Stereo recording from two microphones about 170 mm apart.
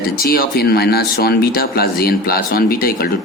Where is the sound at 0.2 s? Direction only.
60° left (ahead or behind).